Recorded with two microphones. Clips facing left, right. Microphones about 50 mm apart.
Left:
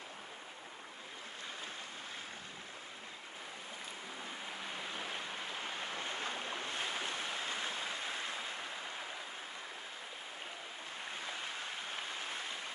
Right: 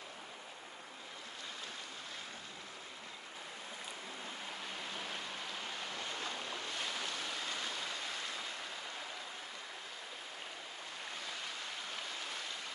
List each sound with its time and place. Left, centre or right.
4.6 s waves: centre
11.1 s stream: left